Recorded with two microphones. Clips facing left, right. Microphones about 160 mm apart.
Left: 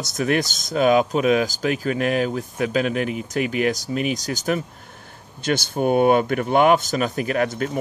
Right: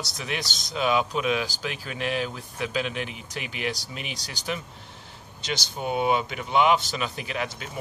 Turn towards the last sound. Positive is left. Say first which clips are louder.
# left 10 dB
turn(degrees=50)  # may be behind; listen again after turning